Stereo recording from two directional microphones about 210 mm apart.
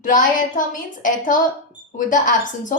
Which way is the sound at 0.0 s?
40° left (ahead or behind).